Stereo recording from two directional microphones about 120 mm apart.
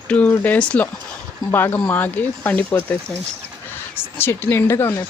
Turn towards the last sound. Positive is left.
turn(degrees=20)  # may be behind; listen again after turning